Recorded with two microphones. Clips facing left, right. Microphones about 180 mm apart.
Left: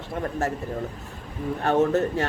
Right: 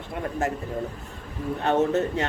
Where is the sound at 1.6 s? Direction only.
20° right (ahead or behind).